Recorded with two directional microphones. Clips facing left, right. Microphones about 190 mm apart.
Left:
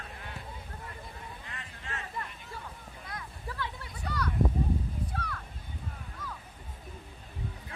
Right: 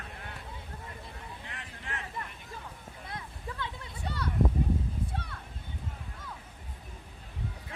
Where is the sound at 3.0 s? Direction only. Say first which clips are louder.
Right 1 dB; 25° right (ahead or behind).